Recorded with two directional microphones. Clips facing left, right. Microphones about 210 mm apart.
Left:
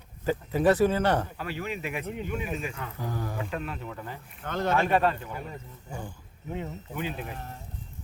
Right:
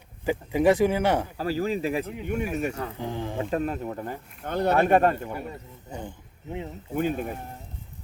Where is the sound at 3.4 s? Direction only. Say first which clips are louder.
Right 7 dB; 40° right (ahead or behind).